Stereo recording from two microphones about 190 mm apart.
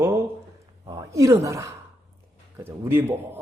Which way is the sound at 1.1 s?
15° right (ahead or behind).